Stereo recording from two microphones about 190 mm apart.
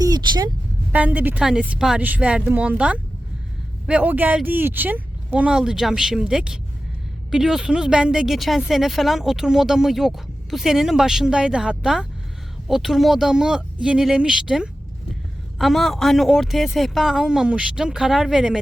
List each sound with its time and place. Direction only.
0.0 s vehicle: 20° right (ahead or behind)
0.9 s a woman's voice: 10° right (ahead or behind)